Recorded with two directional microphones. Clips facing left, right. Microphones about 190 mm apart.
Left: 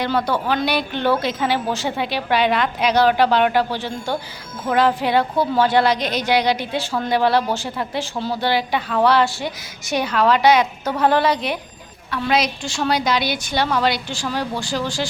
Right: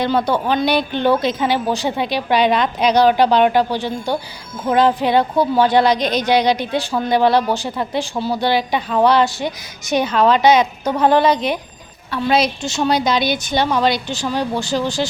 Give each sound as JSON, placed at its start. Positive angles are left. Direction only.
{"t": 0.0, "sound": "a woman's voice", "side_deg": -20}